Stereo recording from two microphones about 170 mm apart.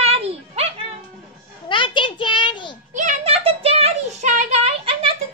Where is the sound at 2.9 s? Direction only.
40° right (ahead or behind).